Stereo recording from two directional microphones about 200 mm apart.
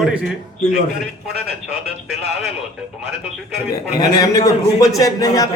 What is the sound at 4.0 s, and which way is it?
A man's voice, 20° left (ahead or behind).